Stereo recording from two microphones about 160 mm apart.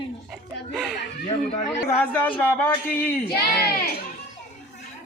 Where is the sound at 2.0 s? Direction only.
10° left (ahead or behind).